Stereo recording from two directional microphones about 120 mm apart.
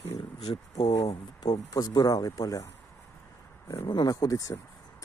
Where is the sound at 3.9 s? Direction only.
35° left (ahead or behind).